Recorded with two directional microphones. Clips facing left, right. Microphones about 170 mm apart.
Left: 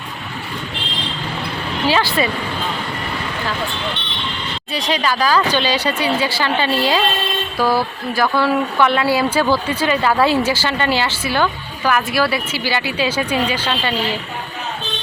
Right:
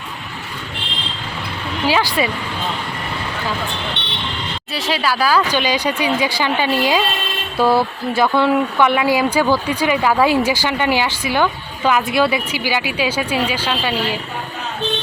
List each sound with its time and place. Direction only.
1.9 s speech: 10° right (ahead or behind)
4.0 s vehicle: 65° right (ahead or behind)
4.7 s speech: 5° right (ahead or behind)
7.6 s speech: 25° right (ahead or behind)